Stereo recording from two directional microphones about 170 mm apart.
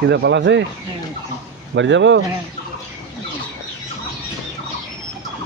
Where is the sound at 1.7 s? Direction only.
90° right.